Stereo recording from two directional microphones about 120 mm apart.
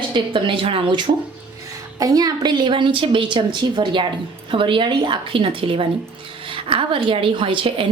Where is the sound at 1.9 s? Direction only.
30° right (ahead or behind); by 7.8 s 45° right (ahead or behind).